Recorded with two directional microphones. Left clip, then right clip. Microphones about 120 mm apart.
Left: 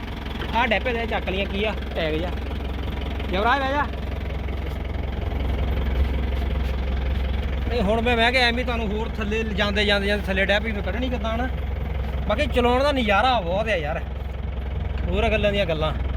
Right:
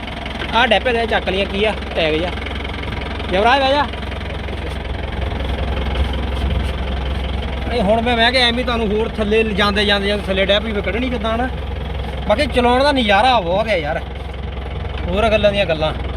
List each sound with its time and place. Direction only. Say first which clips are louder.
0.5 s speech: right 8 dB; 30° right (ahead or behind)
3.3 s speech: right 8 dB; 50° right (ahead or behind)
7.7 s speech: right 6 dB; 25° right (ahead or behind)
8.5 s speech: right 7 dB; 45° right (ahead or behind)
8.8 s speech: right 10 dB; 70° right (ahead or behind)
9.7 s speech: right 2 dB; 35° right (ahead or behind)
10.0 s speech: right 5 dB; 15° right (ahead or behind)
11.2 s speech: right 7 dB; 50° right (ahead or behind)
12.5 s speech: right 5 dB; 5° right (ahead or behind)
13.1 s speech: right 7 dB; 25° right (ahead or behind)
15.1 s speech: right 7 dB; 35° right (ahead or behind)
15.5 s speech: right 6 dB; 5° right (ahead or behind)